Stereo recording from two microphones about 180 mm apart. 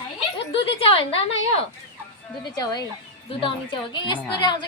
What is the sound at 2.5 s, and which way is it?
A woman's voice, 20° left (ahead or behind).